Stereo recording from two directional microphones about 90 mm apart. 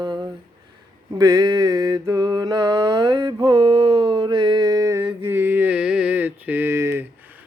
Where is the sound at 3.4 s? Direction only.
70° right (ahead or behind); by 5.0 s 40° right (ahead or behind).